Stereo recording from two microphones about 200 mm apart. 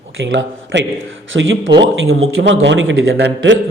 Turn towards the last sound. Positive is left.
turn(degrees=-60)  # may be behind; listen again after turning